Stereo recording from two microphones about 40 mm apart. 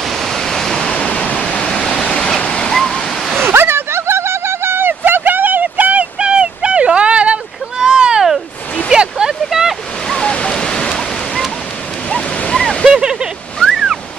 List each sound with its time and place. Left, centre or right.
0.1 s waves: centre
0.8 s waterfall: left
1.7 s waterfall: centre
3.4 s a sound: right
6.1 s a sound: right
9.4 s waterfall: centre
10.0 s a sound: centre
12.1 s waves: left
12.8 s waterfall: centre
13.7 s waves: centre